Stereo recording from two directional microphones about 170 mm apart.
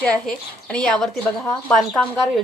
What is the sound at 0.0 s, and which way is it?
A woman's voice, 5° left (ahead or behind).